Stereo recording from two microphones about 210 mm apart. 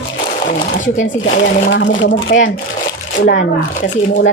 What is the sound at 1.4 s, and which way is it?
Speech, 60° left (ahead or behind).